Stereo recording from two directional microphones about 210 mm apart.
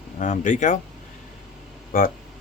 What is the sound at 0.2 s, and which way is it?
Speech, 40° left (ahead or behind).